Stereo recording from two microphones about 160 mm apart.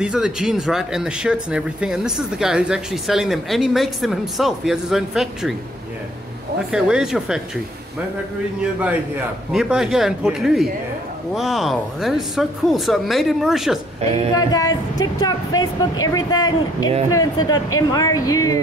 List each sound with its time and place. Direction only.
0.0 s speech: 5° right (ahead or behind)
6.7 s speech: 5° right (ahead or behind)
9.5 s speech: 5° right (ahead or behind)
14.4 s speech: 25° left (ahead or behind)